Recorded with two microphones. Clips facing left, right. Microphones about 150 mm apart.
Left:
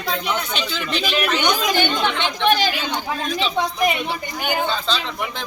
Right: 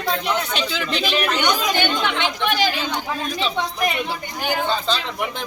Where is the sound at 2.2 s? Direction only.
10° right (ahead or behind).